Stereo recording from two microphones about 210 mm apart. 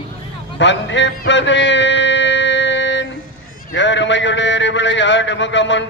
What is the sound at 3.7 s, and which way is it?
A man's voice, 60° left (ahead or behind).